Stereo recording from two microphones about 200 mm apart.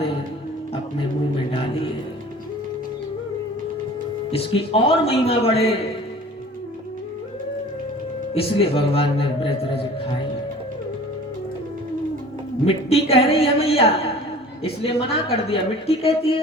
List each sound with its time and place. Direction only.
4.3 s a woman's voice: 25° left (ahead or behind)
8.4 s a woman's voice: 30° left (ahead or behind)
12.6 s a woman's voice: 30° left (ahead or behind)